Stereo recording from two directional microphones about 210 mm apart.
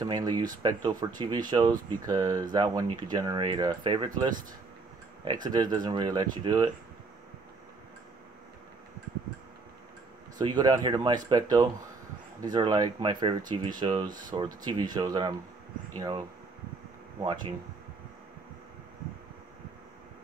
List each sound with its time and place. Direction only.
0.0 s speech: 15° right (ahead or behind)
5.2 s speech: 20° right (ahead or behind)
10.4 s speech: 20° right (ahead or behind)
14.0 s speech: 40° right (ahead or behind)
14.3 s speech: 20° right (ahead or behind)